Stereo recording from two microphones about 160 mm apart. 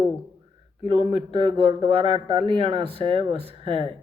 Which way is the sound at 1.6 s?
35° right (ahead or behind).